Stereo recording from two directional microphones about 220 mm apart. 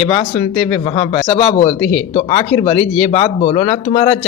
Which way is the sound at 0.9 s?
25° left (ahead or behind).